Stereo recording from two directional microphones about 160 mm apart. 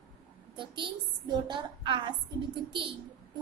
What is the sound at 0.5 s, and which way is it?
A woman's voice, 30° right (ahead or behind).